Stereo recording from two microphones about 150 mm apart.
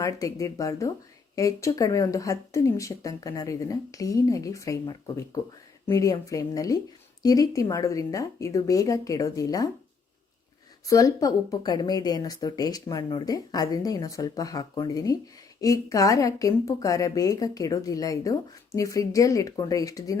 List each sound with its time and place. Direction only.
0.0 s a woman's voice: 20° left (ahead or behind)
10.8 s a woman's voice: 25° left (ahead or behind)